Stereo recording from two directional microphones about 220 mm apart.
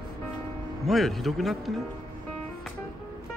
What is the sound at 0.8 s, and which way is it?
Speech, centre (ahead or behind).